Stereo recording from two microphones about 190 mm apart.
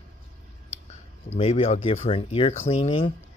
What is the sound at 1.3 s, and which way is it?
Speech, 35° left (ahead or behind).